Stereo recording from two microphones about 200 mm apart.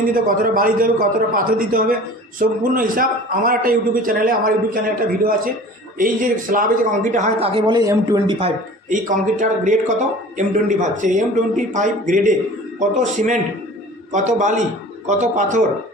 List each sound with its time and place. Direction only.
0.1 s a man's voice: 45° right (ahead or behind); by 8.5 s 20° right (ahead or behind)
8.8 s speech: 40° right (ahead or behind)